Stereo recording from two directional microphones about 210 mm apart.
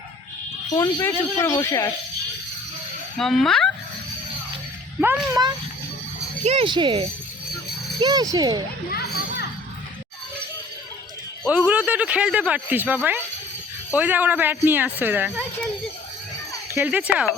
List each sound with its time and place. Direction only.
0.8 s speech: 15° left (ahead or behind)
3.2 s speech: centre (ahead or behind)
4.9 s speech: 5° right (ahead or behind)
5.3 s speech: 20° right (ahead or behind)
8.9 s children playing: 45° left (ahead or behind)
11.4 s speech: 5° right (ahead or behind)
16.7 s speech: 5° right (ahead or behind)